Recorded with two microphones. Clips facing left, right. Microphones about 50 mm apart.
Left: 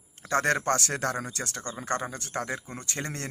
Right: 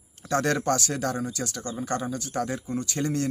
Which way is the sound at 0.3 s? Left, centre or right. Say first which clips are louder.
Right 1 dB; left.